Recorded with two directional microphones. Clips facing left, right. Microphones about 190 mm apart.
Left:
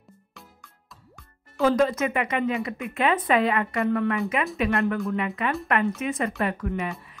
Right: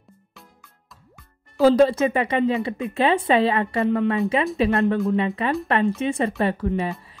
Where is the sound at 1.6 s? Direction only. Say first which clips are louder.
Right 6 dB; 30° right (ahead or behind).